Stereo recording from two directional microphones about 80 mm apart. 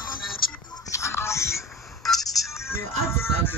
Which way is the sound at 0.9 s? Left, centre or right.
Left.